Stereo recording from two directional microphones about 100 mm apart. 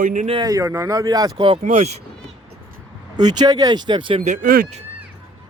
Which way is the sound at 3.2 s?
45° right (ahead or behind).